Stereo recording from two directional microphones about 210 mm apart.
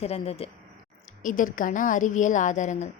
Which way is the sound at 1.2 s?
40° left (ahead or behind).